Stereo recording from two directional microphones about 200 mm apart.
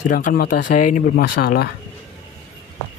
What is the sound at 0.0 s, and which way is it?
Speech, 45° left (ahead or behind).